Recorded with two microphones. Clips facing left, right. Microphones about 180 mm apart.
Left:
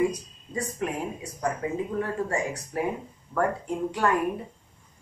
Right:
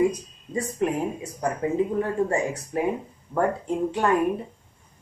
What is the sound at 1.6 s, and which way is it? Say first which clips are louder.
Speech: right 5 dB; 25° right (ahead or behind).